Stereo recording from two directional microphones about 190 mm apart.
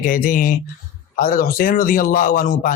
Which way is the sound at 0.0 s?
45° left (ahead or behind).